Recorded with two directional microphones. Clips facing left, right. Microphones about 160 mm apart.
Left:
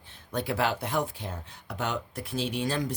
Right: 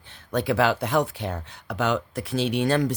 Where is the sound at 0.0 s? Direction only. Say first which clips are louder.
Right 6 dB; 80° right.